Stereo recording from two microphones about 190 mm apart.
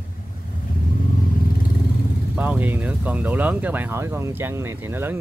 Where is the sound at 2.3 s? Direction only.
10° right (ahead or behind).